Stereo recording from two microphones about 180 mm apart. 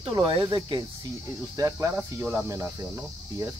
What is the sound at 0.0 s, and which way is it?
Speech, 30° right (ahead or behind).